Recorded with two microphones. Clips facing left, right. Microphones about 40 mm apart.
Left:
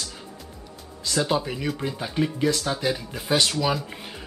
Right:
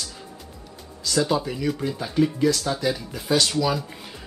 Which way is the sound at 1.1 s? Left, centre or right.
Left.